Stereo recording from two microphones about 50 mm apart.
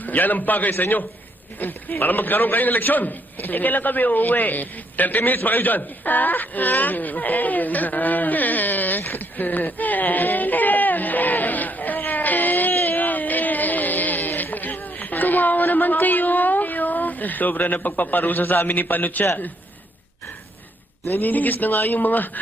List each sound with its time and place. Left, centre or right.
0.0 s a man's voice: left
21.1 s speech: left